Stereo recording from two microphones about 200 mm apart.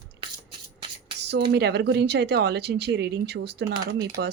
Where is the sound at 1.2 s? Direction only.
60° right (ahead or behind).